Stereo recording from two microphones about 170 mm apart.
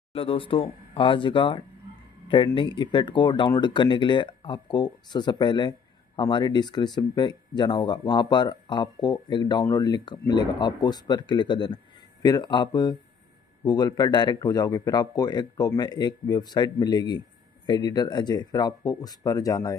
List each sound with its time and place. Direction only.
0.1 s speech: 30° left (ahead or behind)